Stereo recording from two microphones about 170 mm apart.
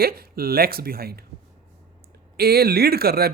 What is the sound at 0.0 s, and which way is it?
Speech, 65° right (ahead or behind).